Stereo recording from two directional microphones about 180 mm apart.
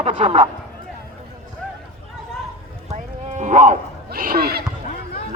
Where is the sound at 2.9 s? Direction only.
40° right (ahead or behind); by 4.6 s 60° right (ahead or behind).